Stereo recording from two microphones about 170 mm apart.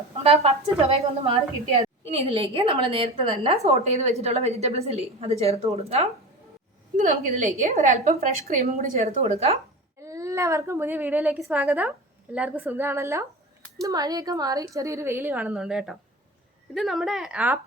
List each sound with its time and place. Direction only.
0.2 s a woman's voice: 35° right (ahead or behind)
10.0 s a woman's voice: 20° right (ahead or behind)